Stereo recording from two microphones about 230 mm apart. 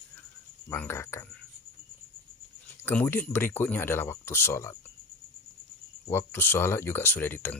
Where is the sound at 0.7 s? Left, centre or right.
Centre.